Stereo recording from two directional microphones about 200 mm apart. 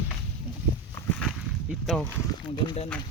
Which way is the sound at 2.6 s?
30° left (ahead or behind).